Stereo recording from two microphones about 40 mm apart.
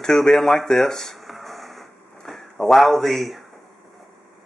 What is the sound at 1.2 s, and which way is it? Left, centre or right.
Music, centre.